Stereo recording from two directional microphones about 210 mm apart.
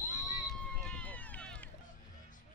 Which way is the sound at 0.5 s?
5° left (ahead or behind).